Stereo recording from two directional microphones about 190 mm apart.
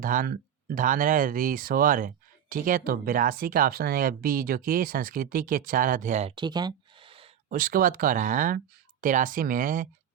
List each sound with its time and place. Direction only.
0.0 s speech: 45° right (ahead or behind)
6.3 s a sound: 20° right (ahead or behind)
7.5 s speech: 45° right (ahead or behind)